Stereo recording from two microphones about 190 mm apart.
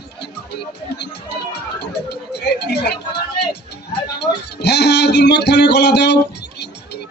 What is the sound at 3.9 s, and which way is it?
Speech, 60° left (ahead or behind).